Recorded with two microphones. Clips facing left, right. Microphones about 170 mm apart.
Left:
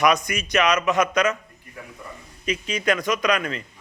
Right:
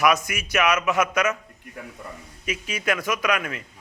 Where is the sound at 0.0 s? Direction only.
5° right (ahead or behind).